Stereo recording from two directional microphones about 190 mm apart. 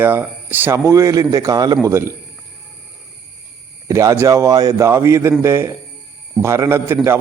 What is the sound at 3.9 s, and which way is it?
Speech, 15° right (ahead or behind).